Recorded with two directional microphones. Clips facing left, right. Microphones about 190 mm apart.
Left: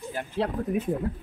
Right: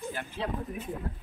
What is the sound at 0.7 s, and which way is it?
Speech, 75° left (ahead or behind).